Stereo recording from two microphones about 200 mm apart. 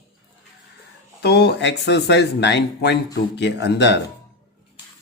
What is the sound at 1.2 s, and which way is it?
Speech, 55° left (ahead or behind).